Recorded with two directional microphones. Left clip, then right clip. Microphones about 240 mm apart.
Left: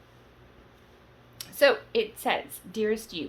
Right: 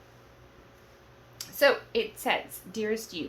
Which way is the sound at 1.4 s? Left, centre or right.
Left.